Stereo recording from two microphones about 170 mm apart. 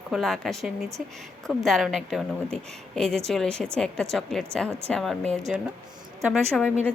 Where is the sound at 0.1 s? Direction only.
Centre (ahead or behind).